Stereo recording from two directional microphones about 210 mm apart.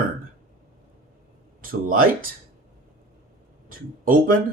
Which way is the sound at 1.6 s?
45° right (ahead or behind).